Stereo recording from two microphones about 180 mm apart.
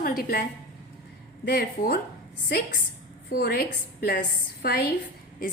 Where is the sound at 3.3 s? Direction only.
55° left (ahead or behind).